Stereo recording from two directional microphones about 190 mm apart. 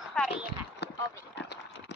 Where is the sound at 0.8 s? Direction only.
60° left (ahead or behind).